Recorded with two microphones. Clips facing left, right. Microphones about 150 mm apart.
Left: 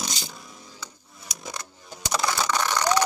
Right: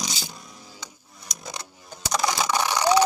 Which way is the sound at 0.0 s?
5° right (ahead or behind).